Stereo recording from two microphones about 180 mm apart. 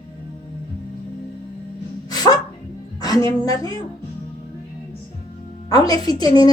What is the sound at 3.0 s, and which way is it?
Speech, 20° left (ahead or behind).